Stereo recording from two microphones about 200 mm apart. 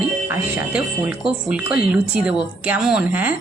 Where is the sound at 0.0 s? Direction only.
10° right (ahead or behind).